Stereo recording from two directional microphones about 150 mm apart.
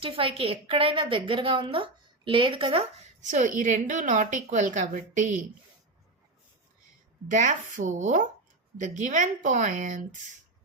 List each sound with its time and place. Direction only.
0.0 s a woman's voice: 35° right (ahead or behind)
3.2 s a woman's voice: 55° right (ahead or behind)
7.3 s a woman's voice: 55° right (ahead or behind)